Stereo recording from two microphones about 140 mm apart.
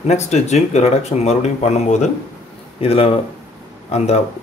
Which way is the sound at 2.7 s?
45° left (ahead or behind).